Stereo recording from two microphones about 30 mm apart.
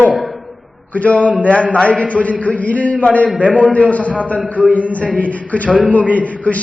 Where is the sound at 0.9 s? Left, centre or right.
Left.